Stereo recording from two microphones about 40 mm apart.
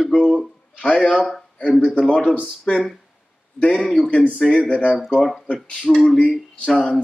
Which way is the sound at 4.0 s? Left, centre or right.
Left.